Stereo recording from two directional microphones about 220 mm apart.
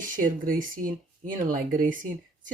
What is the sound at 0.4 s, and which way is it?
Speech, 40° right (ahead or behind).